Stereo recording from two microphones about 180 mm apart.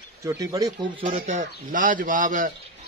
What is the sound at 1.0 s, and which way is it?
A man's voice, 40° right (ahead or behind).